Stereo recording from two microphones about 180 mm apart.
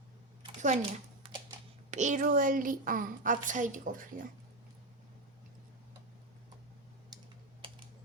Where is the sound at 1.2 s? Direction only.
25° right (ahead or behind).